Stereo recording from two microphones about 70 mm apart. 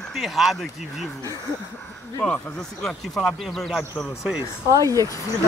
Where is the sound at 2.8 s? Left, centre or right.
Centre.